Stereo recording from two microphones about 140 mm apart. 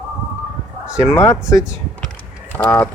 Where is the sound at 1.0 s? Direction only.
20° left (ahead or behind).